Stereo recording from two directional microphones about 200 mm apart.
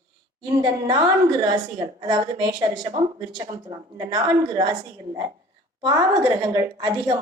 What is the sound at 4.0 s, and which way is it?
Speech, 20° right (ahead or behind).